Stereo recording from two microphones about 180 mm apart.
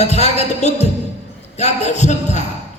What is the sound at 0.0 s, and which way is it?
A man's voice, 40° left (ahead or behind).